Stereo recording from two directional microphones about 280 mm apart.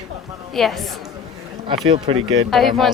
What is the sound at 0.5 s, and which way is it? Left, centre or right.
Speech, centre.